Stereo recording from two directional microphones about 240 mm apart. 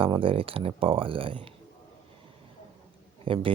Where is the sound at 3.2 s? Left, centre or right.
Right.